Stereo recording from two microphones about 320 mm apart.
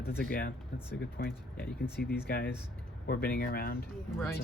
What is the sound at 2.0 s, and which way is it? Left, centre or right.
Speech, left.